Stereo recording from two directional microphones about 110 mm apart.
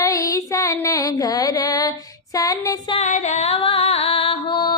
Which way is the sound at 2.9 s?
90° left.